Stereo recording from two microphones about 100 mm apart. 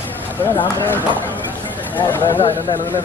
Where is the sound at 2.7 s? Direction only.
55° left (ahead or behind).